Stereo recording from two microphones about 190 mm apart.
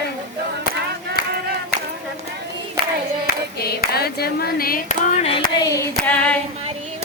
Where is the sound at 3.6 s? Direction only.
55° left (ahead or behind); by 5.7 s 30° left (ahead or behind).